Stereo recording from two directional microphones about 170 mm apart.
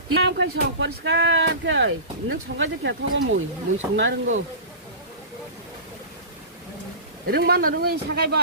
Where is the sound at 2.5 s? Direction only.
65° right (ahead or behind).